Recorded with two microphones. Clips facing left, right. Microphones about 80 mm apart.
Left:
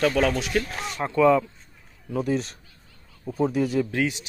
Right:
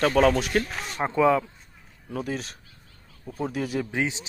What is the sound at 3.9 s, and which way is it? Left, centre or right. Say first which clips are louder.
Speech: left 2 dB; right.